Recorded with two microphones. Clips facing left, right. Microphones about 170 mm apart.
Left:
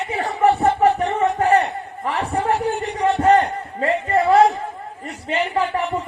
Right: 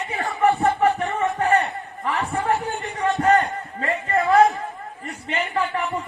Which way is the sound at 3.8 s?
35° left (ahead or behind).